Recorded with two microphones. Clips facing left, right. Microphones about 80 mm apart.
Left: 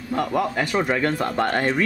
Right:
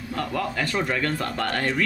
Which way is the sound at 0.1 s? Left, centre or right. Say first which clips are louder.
Left 5 dB; centre.